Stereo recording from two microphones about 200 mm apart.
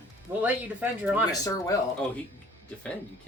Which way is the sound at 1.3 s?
15° left (ahead or behind).